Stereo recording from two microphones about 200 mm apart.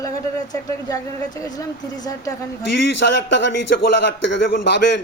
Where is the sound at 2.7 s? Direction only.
60° left (ahead or behind).